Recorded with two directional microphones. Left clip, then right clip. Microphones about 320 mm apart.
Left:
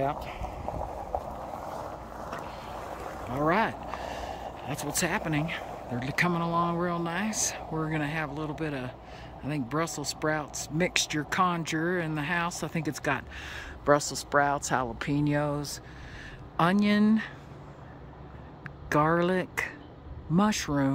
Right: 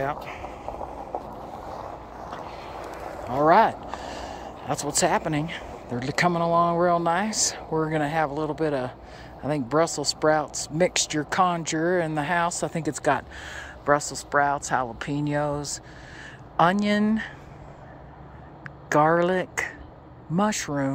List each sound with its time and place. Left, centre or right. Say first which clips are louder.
3.3 s speech: right 9 dB; centre
18.9 s speech: right 5 dB; centre